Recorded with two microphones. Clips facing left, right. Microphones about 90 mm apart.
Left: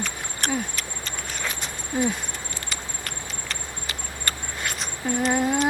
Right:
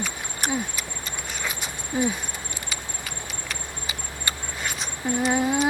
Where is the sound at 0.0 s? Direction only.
10° right (ahead or behind).